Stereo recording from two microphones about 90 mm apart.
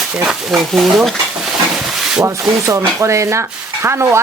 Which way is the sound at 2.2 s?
35° right (ahead or behind).